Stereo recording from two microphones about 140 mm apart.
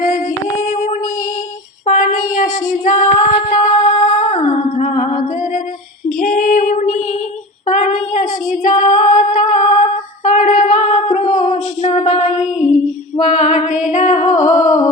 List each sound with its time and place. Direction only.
0.0 s female singing: 55° left (ahead or behind)
1.9 s a sound: 60° left (ahead or behind)
3.5 s female singing: 55° left (ahead or behind)
4.4 s humming: 55° left (ahead or behind)
6.1 s female singing: 80° left; by 7.2 s 60° left (ahead or behind)
7.7 s child singing: 65° left (ahead or behind)
8.6 s female singing: 70° left (ahead or behind)